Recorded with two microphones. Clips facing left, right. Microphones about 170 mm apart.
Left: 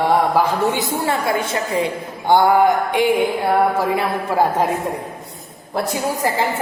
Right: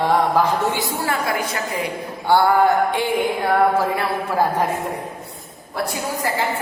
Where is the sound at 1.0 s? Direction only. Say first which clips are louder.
Left 3 dB; 25° left (ahead or behind).